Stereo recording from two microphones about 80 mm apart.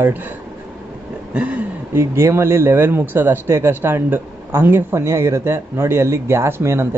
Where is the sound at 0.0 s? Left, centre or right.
Right.